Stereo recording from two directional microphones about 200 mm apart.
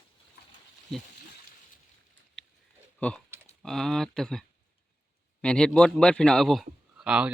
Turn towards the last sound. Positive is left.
turn(degrees=-5)  # may be behind; listen again after turning